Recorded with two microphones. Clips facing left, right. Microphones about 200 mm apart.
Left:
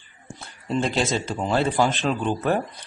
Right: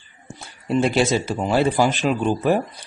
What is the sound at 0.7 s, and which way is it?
Speech, 10° right (ahead or behind).